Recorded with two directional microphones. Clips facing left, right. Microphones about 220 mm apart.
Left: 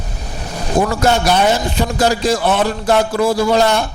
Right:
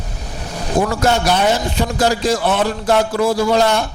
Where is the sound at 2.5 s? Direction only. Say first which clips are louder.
Left 1 dB; 20° left (ahead or behind).